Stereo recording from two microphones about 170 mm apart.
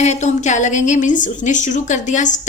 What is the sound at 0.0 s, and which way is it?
A woman's voice, 40° left (ahead or behind).